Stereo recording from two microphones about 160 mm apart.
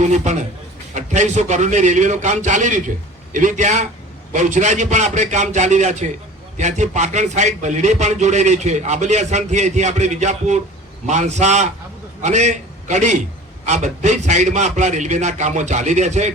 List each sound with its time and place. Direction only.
0.0 s a man's voice: 45° right (ahead or behind)